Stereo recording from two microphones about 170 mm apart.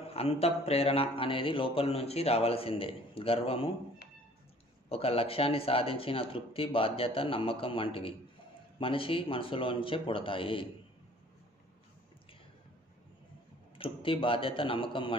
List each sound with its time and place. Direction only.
0.0 s speech: 35° left (ahead or behind)
4.8 s speech: 35° left (ahead or behind)
13.7 s speech: 30° left (ahead or behind)